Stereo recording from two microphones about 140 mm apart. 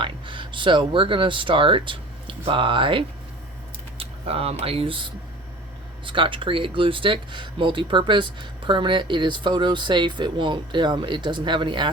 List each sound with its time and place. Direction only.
0.0 s speech: 35° right (ahead or behind)